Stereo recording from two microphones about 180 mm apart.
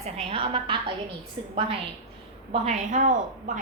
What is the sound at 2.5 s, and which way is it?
A woman's voice, 40° right (ahead or behind).